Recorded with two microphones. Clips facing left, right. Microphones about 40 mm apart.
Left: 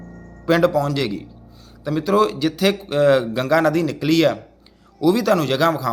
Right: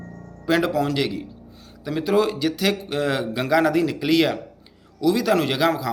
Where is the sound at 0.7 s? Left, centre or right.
Right.